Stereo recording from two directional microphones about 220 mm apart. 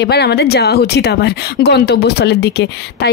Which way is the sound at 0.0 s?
45° left (ahead or behind).